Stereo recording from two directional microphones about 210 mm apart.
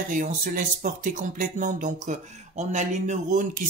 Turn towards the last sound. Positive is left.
turn(degrees=-35)  # may be behind; listen again after turning